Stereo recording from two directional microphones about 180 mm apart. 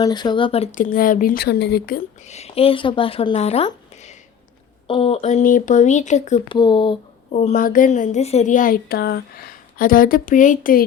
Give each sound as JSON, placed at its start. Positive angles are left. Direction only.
{"t": 0.0, "sound": "speech", "side_deg": 25}
{"t": 2.2, "sound": "speech", "side_deg": 35}
{"t": 6.5, "sound": "speech", "side_deg": 25}
{"t": 7.3, "sound": "speech", "side_deg": 45}